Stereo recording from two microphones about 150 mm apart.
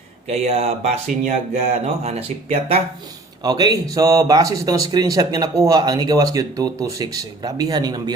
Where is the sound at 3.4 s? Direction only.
25° right (ahead or behind).